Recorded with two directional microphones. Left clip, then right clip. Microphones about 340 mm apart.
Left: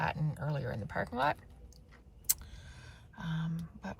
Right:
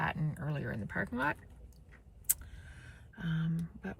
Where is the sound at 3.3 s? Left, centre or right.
Centre.